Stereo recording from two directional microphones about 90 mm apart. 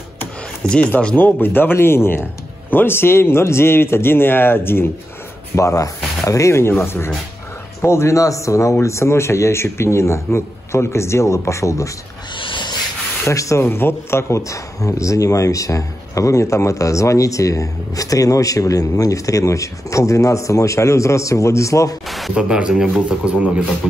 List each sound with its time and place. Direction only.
0.7 s a man's voice: 10° left (ahead or behind)
5.6 s a man's voice: 35° left (ahead or behind)
12.4 s a sound: 65° left (ahead or behind)
13.2 s speech: 35° left (ahead or behind)
22.0 s a sound: centre (ahead or behind)
22.3 s speech: 10° right (ahead or behind)